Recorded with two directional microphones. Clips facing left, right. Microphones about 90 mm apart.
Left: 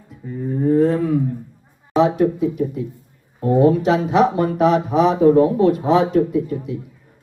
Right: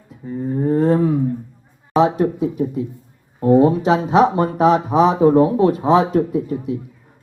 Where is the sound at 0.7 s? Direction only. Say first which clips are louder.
Even; 35° right (ahead or behind).